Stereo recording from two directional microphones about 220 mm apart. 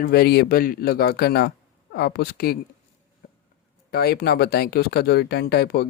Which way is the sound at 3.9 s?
45° left (ahead or behind).